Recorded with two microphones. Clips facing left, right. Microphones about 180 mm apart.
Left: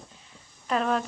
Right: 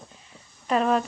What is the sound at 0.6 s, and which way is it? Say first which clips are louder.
Speech: right 4 dB; 5° right (ahead or behind).